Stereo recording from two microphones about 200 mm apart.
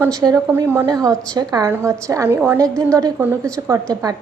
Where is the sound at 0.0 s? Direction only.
20° right (ahead or behind).